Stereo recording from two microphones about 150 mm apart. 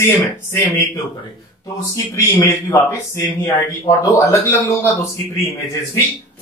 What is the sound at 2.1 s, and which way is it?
Speech, 20° left (ahead or behind).